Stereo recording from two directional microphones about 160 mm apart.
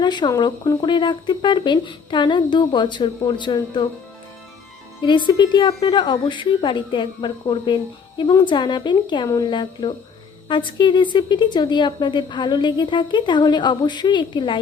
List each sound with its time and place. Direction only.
0.0 s a woman's voice: 30° left (ahead or behind)
5.0 s a woman's voice: 30° left (ahead or behind)